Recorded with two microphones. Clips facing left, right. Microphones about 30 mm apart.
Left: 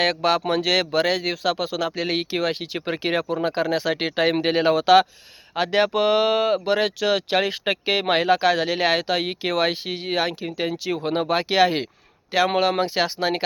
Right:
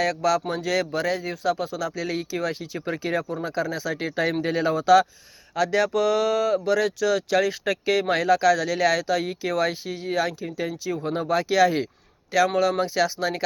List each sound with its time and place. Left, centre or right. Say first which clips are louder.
0.0 s speech: left 2 dB; left
5.5 s speech: left 2 dB; left
11.1 s speech: left 1 dB; left